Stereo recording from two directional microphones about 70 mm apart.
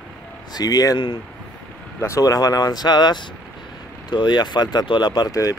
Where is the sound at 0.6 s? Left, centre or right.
Left.